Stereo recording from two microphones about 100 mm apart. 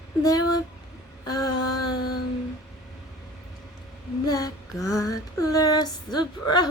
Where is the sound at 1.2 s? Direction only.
40° left (ahead or behind).